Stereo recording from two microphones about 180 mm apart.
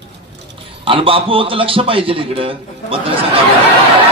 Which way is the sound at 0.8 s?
30° right (ahead or behind).